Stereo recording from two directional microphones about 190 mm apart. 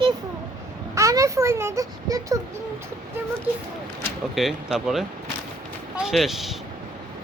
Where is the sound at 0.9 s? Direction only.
15° right (ahead or behind).